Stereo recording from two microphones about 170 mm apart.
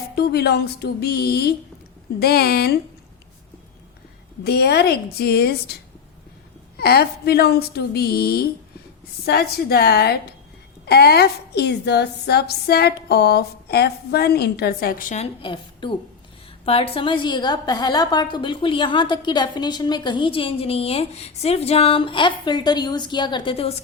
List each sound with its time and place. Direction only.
0.2 s a woman's voice: 70° left (ahead or behind)
4.4 s a woman's voice: 70° left (ahead or behind)
6.7 s a woman's voice: 70° left (ahead or behind)
15.1 s a woman's voice: 35° left (ahead or behind)